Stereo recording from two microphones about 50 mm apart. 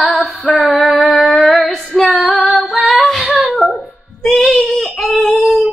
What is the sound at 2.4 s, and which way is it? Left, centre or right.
Female singing, centre.